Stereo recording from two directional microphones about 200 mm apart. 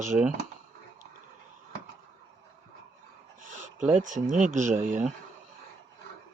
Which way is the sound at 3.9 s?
40° right (ahead or behind).